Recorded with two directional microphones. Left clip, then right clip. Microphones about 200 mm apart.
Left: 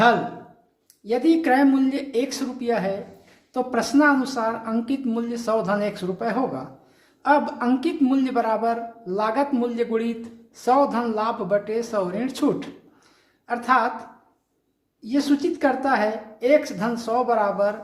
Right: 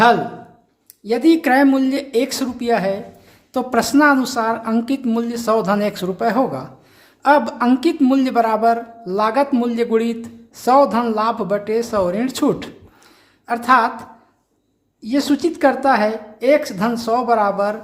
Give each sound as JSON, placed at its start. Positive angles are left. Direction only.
{"t": 1.0, "sound": "a man's voice", "side_deg": -35}
{"t": 15.0, "sound": "a man's voice", "side_deg": -35}